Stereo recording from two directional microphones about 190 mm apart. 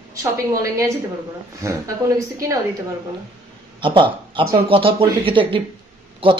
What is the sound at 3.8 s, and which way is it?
Speech, 25° right (ahead or behind).